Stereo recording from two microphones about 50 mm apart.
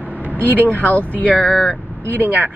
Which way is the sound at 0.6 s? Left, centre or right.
Left.